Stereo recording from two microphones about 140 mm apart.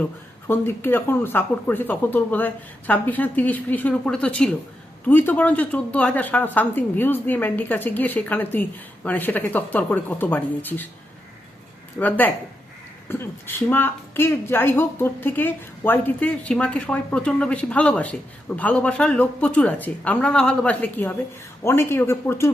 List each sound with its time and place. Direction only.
0.4 s a woman's voice: 15° left (ahead or behind)
11.9 s a woman's voice: 15° left (ahead or behind)